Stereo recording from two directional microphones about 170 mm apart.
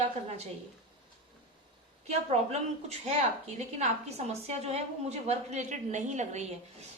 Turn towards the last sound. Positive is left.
turn(degrees=-45)  # may be behind; listen again after turning